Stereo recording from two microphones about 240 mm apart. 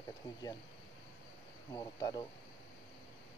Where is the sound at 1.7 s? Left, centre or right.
Centre.